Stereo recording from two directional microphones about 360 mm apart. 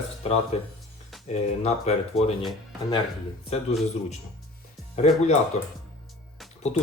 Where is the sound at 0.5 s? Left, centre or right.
Centre.